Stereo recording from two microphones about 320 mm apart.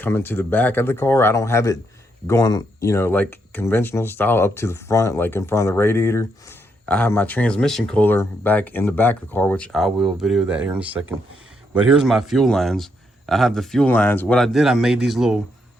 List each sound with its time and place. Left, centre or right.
0.0 s a man's voice: centre